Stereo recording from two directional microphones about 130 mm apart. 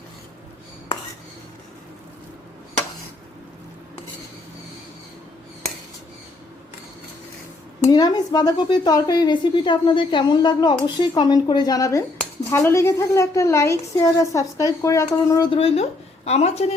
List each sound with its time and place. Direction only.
7.9 s a woman's voice: 30° left (ahead or behind)
15.4 s speech: 50° left (ahead or behind)